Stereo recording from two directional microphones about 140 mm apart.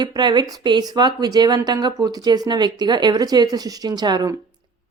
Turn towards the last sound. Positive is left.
turn(degrees=-30)  # may be behind; listen again after turning